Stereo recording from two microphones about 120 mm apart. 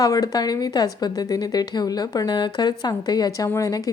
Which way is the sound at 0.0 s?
30° left (ahead or behind).